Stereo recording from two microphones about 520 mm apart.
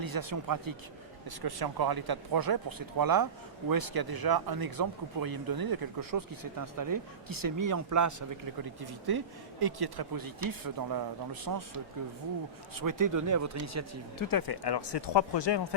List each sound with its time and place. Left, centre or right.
0.0 s speech: right
8.8 s speech: right
12.7 s speech: right
14.2 s speech: left